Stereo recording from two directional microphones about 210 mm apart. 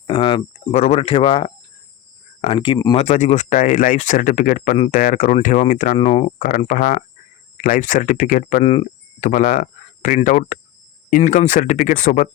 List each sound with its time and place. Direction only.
0.1 s speech: 25° left (ahead or behind)
3.0 s speech: 30° left (ahead or behind)
8.6 s speech: 25° left (ahead or behind)